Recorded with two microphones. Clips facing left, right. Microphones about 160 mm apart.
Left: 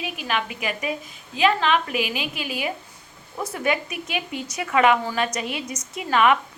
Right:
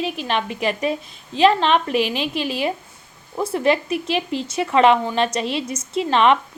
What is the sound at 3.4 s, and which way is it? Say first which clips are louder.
Speech: right 6 dB; 30° right (ahead or behind).